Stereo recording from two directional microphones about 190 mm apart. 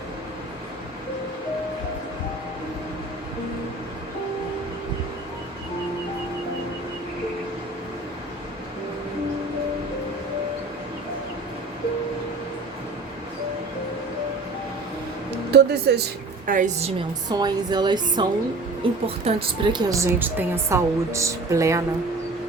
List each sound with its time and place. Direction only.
15.9 s speech: 60° right (ahead or behind)
16.5 s a woman's voice: 40° right (ahead or behind)
17.2 s speech: 20° right (ahead or behind)